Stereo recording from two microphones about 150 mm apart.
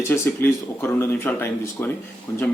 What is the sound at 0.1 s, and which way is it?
Speech, 15° left (ahead or behind).